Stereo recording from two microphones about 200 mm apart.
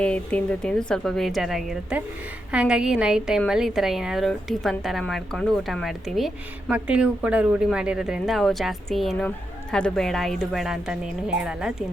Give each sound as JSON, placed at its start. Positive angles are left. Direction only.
{"t": 0.0, "sound": "a woman's voice", "side_deg": 5}